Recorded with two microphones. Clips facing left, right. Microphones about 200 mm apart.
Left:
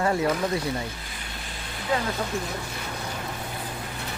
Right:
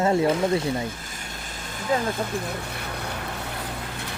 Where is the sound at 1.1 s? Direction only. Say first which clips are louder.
Right 1 dB; 45° right (ahead or behind).